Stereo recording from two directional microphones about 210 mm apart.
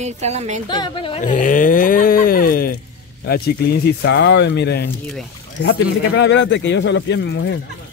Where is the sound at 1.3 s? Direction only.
40° left (ahead or behind); by 7.1 s 55° left (ahead or behind).